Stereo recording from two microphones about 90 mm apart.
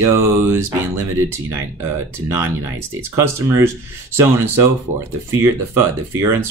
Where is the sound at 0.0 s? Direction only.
30° right (ahead or behind).